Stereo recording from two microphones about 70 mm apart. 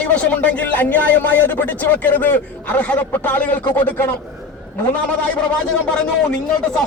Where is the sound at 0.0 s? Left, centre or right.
Centre.